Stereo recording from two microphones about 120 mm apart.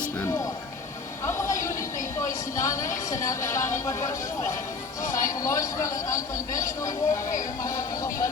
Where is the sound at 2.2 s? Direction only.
25° left (ahead or behind).